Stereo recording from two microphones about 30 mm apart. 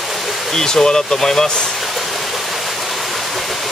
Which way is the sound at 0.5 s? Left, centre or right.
Left.